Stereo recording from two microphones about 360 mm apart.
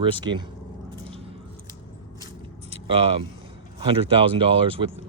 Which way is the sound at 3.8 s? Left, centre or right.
Centre.